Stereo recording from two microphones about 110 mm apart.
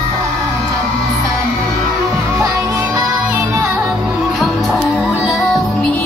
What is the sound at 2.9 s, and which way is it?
Music, 20° right (ahead or behind).